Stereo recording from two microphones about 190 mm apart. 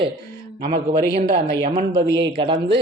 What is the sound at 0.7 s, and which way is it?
A man's voice, 50° right (ahead or behind).